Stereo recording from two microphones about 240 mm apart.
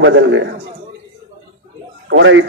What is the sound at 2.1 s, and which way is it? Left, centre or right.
Speech, right.